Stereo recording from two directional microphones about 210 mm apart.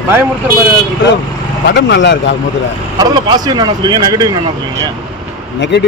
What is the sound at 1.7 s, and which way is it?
Speech, 60° left (ahead or behind).